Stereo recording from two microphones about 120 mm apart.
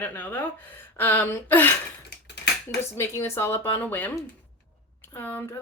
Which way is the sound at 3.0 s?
20° left (ahead or behind).